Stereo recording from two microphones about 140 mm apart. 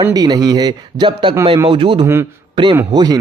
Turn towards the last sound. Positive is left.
turn(degrees=-30)  # may be behind; listen again after turning